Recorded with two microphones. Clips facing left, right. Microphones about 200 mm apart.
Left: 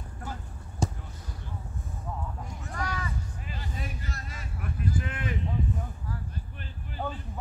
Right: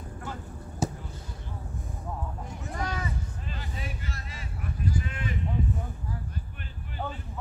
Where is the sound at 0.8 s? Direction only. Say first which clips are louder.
Right 1 dB; 5° right (ahead or behind).